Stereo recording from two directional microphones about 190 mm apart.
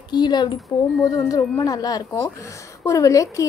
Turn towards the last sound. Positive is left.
turn(degrees=15)  # may be behind; listen again after turning